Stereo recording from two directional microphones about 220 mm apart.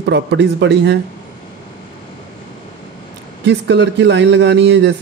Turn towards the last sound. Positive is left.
turn(degrees=-50)  # may be behind; listen again after turning